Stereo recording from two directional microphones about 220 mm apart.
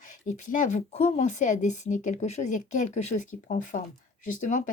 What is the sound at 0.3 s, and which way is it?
Speech, 35° left (ahead or behind).